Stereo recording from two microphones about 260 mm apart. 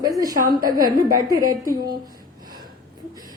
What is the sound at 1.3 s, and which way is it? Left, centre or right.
Speech, centre.